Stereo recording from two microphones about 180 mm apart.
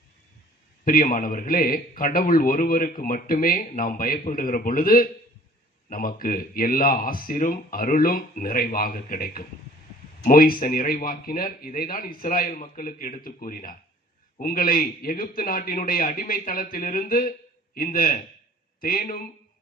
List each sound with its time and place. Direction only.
0.9 s a man's voice: 50° left (ahead or behind)